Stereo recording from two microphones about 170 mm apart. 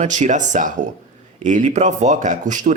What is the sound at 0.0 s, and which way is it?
Speech, 45° right (ahead or behind).